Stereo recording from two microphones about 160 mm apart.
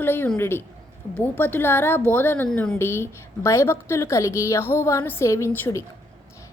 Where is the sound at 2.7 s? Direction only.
15° left (ahead or behind).